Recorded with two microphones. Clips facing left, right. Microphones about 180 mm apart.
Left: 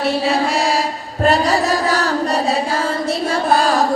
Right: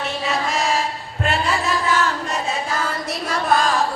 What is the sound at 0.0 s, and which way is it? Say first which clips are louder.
Mantra: left 7 dB; 35° left (ahead or behind).